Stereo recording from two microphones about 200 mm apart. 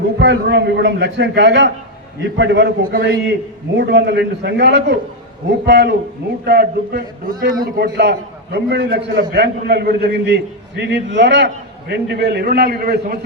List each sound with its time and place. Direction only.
0.2 s a man's voice: 60° right (ahead or behind)